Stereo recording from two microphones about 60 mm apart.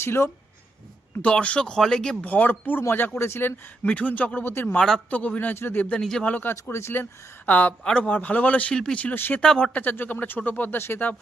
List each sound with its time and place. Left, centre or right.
0.0 s speech: left
1.2 s speech: centre
2.2 s speech: left
3.8 s speech: left
4.4 s speech: left
5.1 s speech: left
6.0 s speech: centre
6.2 s speech: left
6.5 s speech: left
8.7 s speech: centre
9.1 s speech: left
9.4 s speech: centre
9.7 s speech: left